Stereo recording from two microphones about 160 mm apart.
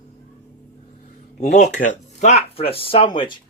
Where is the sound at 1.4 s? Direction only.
45° left (ahead or behind).